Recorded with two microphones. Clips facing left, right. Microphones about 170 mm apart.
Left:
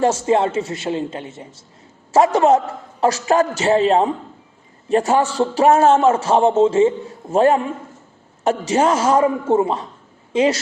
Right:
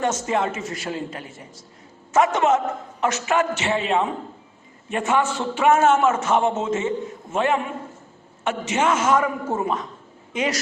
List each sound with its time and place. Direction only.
0.0 s a man's voice: 30° left (ahead or behind)